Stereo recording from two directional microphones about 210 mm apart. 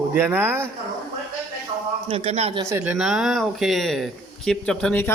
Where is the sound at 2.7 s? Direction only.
10° right (ahead or behind); by 5.1 s 5° left (ahead or behind).